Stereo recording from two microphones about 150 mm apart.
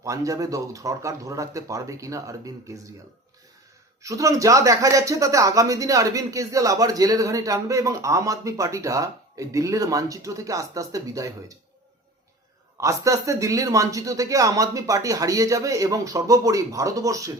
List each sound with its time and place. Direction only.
0.0 s speech: 20° right (ahead or behind)
4.0 s speech: 20° right (ahead or behind)
12.7 s speech: 20° right (ahead or behind)